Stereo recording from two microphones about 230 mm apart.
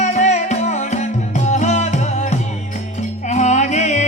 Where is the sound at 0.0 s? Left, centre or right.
Left.